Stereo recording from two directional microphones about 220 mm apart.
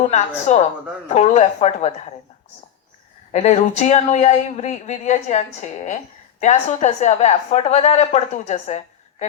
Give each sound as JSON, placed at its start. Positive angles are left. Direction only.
{"t": 0.1, "sound": "a woman's voice", "side_deg": 30}
{"t": 3.3, "sound": "a woman's voice", "side_deg": 30}